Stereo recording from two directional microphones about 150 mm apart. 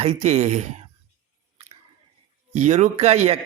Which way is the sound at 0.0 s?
50° right (ahead or behind).